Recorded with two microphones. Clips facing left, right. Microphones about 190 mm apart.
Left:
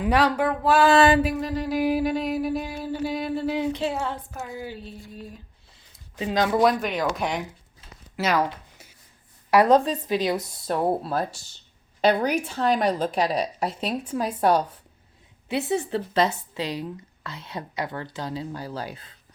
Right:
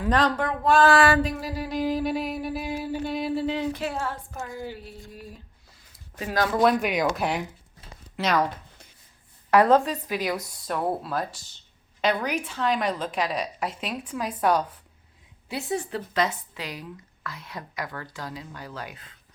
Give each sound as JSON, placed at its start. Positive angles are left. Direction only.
{"t": 0.0, "sound": "speech", "side_deg": 10}
{"t": 0.9, "sound": "speech", "side_deg": 20}
{"t": 1.4, "sound": "a sound", "side_deg": -5}
{"t": 1.7, "sound": "speech", "side_deg": 10}
{"t": 2.0, "sound": "a sound", "side_deg": 0}
{"t": 3.5, "sound": "speech", "side_deg": 15}
{"t": 4.3, "sound": "a sound", "side_deg": 5}
{"t": 6.1, "sound": "speech", "side_deg": 20}
{"t": 6.6, "sound": "a sound", "side_deg": 0}
{"t": 9.5, "sound": "speech", "side_deg": 15}
{"t": 9.8, "sound": "a woman's voice", "side_deg": 25}
{"t": 15.4, "sound": "speech", "side_deg": 25}